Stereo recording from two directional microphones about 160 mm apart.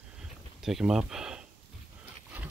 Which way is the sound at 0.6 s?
5° right (ahead or behind).